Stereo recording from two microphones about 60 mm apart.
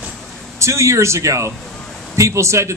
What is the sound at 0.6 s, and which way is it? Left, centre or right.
A man's voice, right.